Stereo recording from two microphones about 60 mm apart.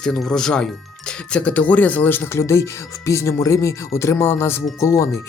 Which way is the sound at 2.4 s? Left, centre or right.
Left.